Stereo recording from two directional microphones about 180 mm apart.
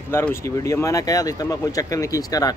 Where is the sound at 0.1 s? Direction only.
15° left (ahead or behind).